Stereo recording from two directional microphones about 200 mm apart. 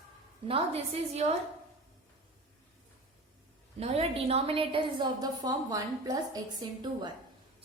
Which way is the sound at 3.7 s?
30° right (ahead or behind).